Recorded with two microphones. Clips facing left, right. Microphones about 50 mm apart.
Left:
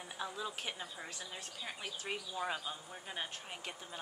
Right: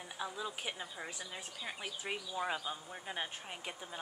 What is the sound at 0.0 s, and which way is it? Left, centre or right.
A woman's voice, centre.